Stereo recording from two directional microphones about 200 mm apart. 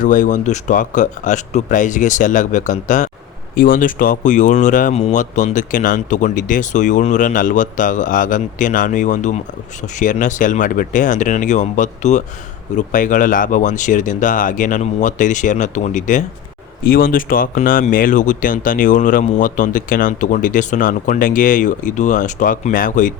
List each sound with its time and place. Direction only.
0.0 s speech: 40° left (ahead or behind)